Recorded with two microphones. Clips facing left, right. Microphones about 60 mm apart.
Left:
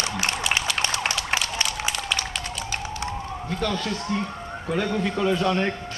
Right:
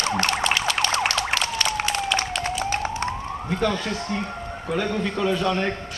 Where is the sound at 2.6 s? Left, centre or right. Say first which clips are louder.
Right 5 dB; right.